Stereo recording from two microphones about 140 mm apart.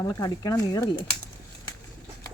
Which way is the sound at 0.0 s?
25° left (ahead or behind).